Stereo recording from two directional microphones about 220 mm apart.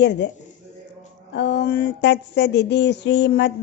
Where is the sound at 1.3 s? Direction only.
50° left (ahead or behind).